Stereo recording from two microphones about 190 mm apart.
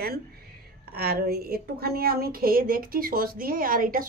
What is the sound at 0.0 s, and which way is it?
A woman's voice, 55° right (ahead or behind).